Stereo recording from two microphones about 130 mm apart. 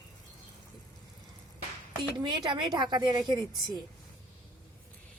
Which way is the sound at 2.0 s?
35° right (ahead or behind).